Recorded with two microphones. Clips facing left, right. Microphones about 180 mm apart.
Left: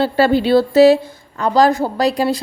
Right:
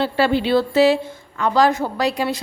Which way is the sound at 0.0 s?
40° left (ahead or behind).